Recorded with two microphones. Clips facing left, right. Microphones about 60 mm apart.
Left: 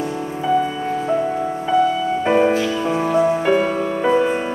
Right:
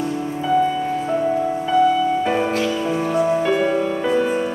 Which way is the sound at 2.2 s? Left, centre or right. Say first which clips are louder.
Left 3 dB; left.